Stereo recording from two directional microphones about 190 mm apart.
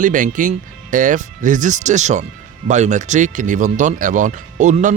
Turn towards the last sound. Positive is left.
turn(degrees=-40)  # may be behind; listen again after turning